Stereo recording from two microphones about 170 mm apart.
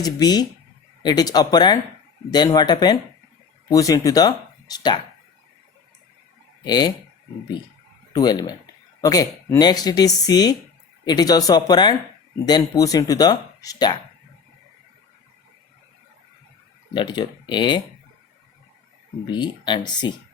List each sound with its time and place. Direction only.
0.0 s speech: 25° left (ahead or behind)
6.7 s speech: 25° left (ahead or behind)
8.1 s speech: 25° left (ahead or behind)
16.9 s speech: 25° left (ahead or behind)
19.2 s speech: 25° left (ahead or behind)